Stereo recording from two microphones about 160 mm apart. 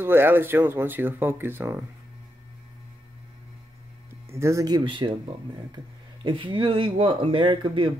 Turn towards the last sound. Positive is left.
turn(degrees=-30)  # may be behind; listen again after turning